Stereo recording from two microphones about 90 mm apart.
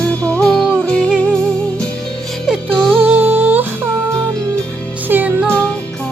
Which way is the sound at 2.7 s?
10° left (ahead or behind).